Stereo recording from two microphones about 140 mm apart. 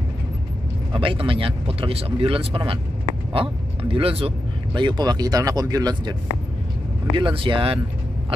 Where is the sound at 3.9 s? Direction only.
45° right (ahead or behind).